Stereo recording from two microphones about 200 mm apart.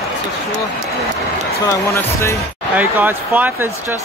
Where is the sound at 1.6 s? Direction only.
15° left (ahead or behind).